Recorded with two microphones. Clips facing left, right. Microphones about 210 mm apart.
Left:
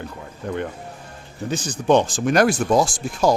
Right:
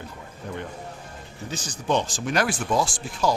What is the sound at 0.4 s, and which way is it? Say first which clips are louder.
Speech: left 7 dB; 60° left (ahead or behind).